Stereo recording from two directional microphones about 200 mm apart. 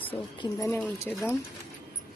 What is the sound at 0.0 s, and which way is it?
Speech, 25° left (ahead or behind).